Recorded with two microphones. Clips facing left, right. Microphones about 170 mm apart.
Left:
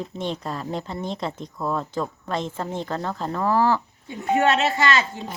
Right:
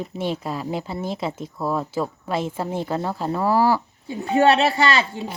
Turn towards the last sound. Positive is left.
turn(degrees=-35)  # may be behind; listen again after turning